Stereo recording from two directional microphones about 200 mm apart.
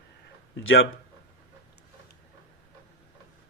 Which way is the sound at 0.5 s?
70° left (ahead or behind).